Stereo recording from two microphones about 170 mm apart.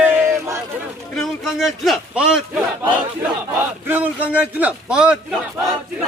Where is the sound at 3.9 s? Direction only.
10° right (ahead or behind).